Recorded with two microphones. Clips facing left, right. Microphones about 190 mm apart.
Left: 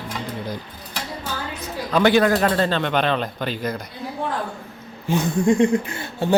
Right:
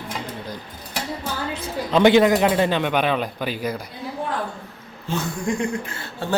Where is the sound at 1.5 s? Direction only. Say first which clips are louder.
Right 2 dB; 25° right (ahead or behind); by 3.8 s 10° right (ahead or behind).